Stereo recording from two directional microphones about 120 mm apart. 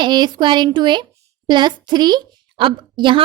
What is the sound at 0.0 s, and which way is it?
A woman's voice, 40° right (ahead or behind).